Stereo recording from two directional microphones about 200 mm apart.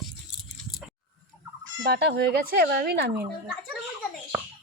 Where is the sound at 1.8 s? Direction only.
60° right (ahead or behind).